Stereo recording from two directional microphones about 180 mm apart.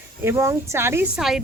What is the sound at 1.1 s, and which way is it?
Speech, centre (ahead or behind).